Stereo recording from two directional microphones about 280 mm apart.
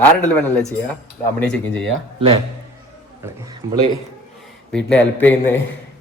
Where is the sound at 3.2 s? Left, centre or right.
Centre.